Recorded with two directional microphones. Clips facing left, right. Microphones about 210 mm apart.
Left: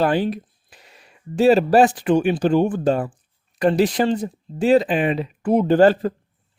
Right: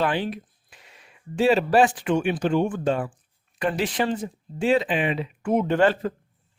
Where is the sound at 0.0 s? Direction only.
40° left (ahead or behind).